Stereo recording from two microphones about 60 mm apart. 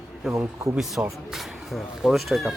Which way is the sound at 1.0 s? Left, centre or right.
Right.